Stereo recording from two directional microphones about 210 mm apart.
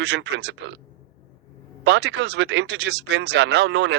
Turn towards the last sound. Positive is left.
turn(degrees=-55)  # may be behind; listen again after turning